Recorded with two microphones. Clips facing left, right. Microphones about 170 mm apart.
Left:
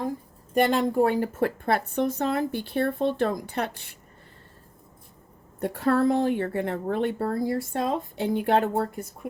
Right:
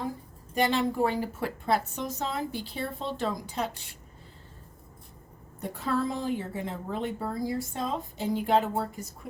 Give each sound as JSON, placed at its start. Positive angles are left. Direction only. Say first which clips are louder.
{"t": 0.5, "sound": "a woman's voice", "louder": "left 5 dB", "side_deg": 55}
{"t": 5.5, "sound": "a woman's voice", "louder": "left 7 dB", "side_deg": 60}